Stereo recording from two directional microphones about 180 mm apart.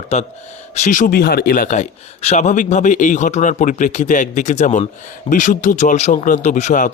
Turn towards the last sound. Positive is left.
turn(degrees=45)  # may be behind; listen again after turning